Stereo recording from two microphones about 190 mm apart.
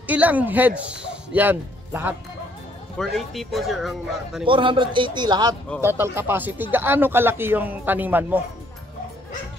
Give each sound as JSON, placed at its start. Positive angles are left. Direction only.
{"t": 0.0, "sound": "speech", "side_deg": -10}
{"t": 3.0, "sound": "speech", "side_deg": 0}
{"t": 4.5, "sound": "a man's voice", "side_deg": -25}